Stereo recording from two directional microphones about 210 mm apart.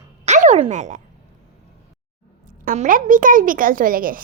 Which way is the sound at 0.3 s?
35° right (ahead or behind).